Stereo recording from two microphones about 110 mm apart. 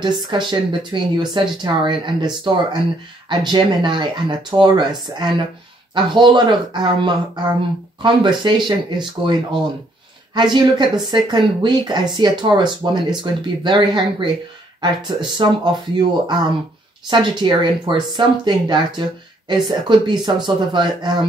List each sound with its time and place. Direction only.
0.0 s speech: 45° right (ahead or behind)